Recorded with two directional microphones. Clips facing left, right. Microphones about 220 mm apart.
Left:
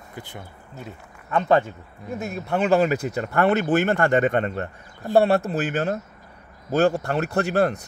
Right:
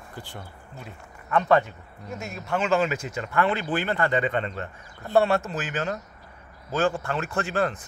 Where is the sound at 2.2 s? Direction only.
55° left (ahead or behind).